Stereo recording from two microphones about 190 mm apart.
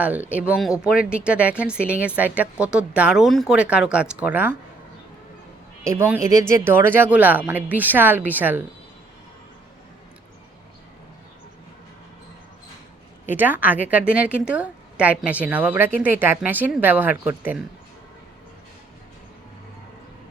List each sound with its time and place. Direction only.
0.0 s speech: 10° right (ahead or behind)
5.8 s speech: 15° right (ahead or behind)
13.2 s speech: 10° right (ahead or behind)